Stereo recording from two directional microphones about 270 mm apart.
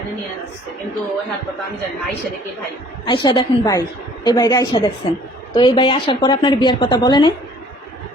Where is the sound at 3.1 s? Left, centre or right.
Centre.